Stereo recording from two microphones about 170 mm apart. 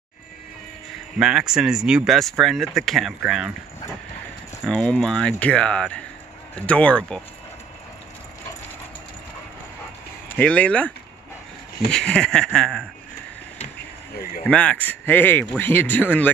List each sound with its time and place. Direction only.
1.2 s speech: 5° right (ahead or behind)
4.6 s speech: 5° left (ahead or behind)
10.2 s speech: 10° left (ahead or behind)
11.9 s speech: 5° left (ahead or behind)
14.1 s speech: 60° left (ahead or behind)
14.4 s speech: 5° left (ahead or behind)